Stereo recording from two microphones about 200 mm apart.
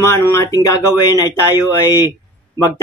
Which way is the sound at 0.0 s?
15° left (ahead or behind).